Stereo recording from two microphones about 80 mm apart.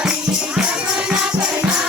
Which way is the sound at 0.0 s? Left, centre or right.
Centre.